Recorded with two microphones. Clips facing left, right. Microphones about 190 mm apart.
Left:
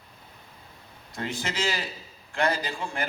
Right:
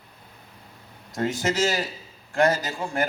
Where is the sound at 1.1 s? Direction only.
45° right (ahead or behind).